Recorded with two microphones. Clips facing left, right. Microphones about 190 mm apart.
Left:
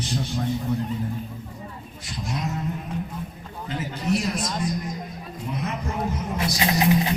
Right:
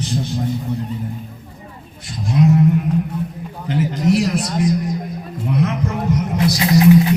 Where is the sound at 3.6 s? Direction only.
90° right.